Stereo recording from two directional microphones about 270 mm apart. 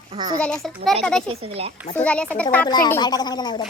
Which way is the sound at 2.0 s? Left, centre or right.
Centre.